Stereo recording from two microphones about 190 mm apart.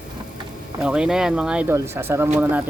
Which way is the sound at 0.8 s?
5° right (ahead or behind).